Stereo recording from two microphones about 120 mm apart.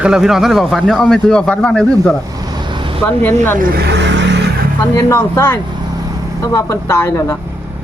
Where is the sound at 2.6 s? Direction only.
40° right (ahead or behind).